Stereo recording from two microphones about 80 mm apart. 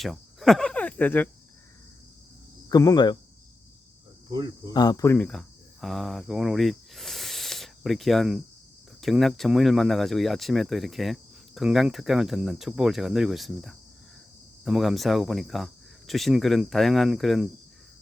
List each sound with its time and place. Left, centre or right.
0.0 s cricket: centre; by 1.3 s left
2.6 s speech: left
4.3 s cricket: right
4.7 s speech: left
5.1 s speech: centre